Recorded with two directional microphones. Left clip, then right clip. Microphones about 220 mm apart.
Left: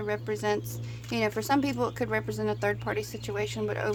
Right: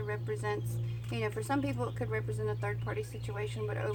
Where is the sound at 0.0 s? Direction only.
50° left (ahead or behind).